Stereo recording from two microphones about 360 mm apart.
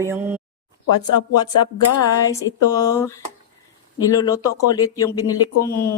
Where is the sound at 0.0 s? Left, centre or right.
Centre.